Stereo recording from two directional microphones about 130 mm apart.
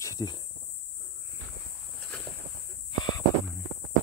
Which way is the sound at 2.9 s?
35° left (ahead or behind).